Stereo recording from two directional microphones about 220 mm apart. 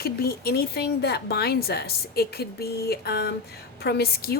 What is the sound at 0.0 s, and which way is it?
A woman's voice, 45° left (ahead or behind).